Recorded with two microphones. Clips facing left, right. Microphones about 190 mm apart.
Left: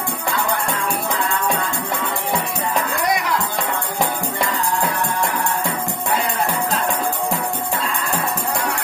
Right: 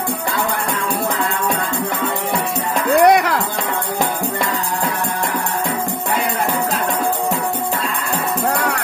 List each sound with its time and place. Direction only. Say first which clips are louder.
3.0 s music: right 12 dB; 70° right (ahead or behind)